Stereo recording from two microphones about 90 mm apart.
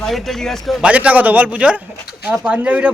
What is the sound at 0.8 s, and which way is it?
Speech, 15° right (ahead or behind).